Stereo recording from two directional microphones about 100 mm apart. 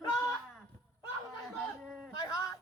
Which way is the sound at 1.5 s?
Centre (ahead or behind).